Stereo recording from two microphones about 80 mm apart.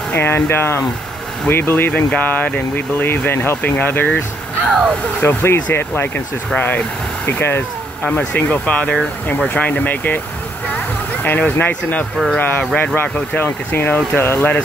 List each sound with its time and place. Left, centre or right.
0.1 s speech: left
4.6 s speech: centre
5.2 s speech: left
11.2 s speech: left